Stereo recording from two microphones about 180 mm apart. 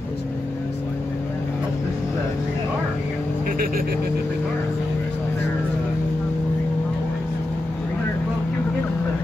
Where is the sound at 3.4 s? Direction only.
50° right (ahead or behind).